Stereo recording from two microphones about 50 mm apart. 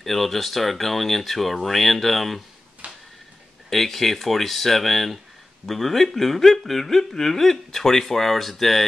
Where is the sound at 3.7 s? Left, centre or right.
Centre.